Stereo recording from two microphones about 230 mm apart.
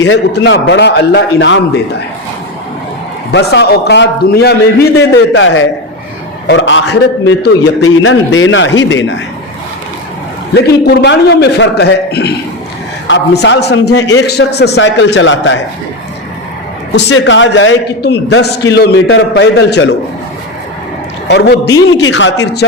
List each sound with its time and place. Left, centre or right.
0.0 s a man's voice: left
3.3 s a man's voice: left
10.5 s a man's voice: left
16.9 s a man's voice: left
21.2 s a man's voice: left